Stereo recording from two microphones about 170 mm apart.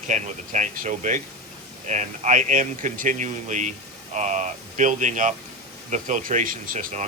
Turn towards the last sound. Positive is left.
turn(degrees=-45)  # may be behind; listen again after turning